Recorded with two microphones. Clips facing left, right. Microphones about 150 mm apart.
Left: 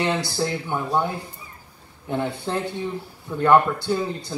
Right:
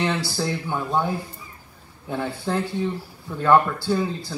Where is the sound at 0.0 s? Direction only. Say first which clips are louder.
Left 1 dB; 20° left (ahead or behind).